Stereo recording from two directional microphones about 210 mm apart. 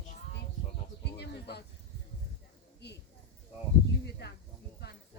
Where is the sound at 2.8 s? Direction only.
55° left (ahead or behind).